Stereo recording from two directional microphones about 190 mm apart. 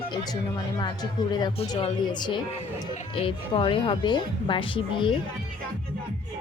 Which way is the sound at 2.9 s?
35° left (ahead or behind).